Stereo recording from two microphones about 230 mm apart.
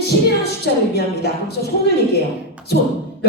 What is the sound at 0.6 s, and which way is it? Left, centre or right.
Speech, left.